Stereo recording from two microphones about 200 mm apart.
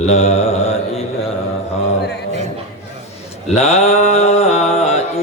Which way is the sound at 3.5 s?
35° left (ahead or behind).